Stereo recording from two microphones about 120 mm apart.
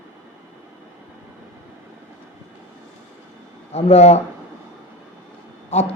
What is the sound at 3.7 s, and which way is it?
Speech, 60° left (ahead or behind).